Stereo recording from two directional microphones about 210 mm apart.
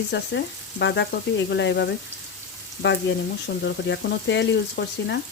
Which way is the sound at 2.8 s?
55° left (ahead or behind).